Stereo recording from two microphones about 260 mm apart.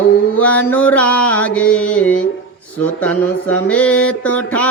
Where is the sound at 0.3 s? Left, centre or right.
Centre.